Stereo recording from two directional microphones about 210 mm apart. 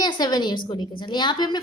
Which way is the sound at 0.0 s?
20° left (ahead or behind).